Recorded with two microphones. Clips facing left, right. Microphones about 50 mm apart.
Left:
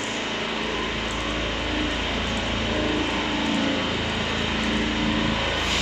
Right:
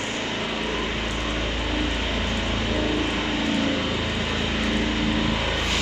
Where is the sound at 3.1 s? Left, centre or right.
Centre.